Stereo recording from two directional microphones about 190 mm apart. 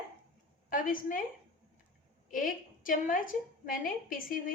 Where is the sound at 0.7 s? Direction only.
45° left (ahead or behind).